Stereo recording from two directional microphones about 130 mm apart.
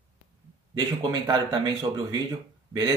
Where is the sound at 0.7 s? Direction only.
30° right (ahead or behind).